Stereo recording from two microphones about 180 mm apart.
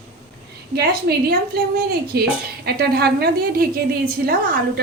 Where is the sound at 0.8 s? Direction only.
60° right (ahead or behind).